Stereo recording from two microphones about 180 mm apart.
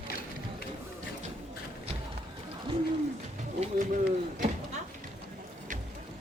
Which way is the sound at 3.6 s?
50° right (ahead or behind).